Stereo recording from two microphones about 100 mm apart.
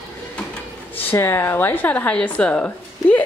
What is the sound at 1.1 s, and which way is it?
Speech, 25° left (ahead or behind).